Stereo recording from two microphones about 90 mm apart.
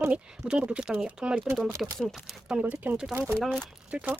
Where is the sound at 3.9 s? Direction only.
10° right (ahead or behind).